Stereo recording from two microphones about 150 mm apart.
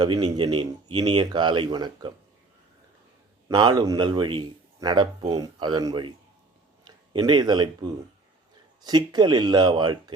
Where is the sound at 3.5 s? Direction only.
25° right (ahead or behind).